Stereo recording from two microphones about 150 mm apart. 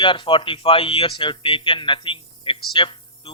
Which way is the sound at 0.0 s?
35° left (ahead or behind).